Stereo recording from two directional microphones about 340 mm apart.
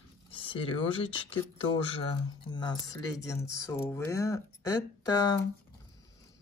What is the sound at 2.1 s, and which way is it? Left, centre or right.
Speech, centre.